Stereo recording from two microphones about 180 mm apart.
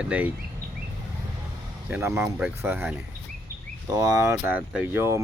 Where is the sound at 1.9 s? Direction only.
15° right (ahead or behind).